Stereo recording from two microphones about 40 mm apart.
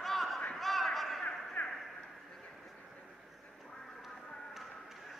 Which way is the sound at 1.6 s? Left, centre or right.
Left.